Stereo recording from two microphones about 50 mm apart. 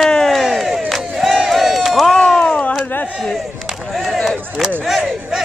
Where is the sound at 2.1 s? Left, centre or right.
Centre.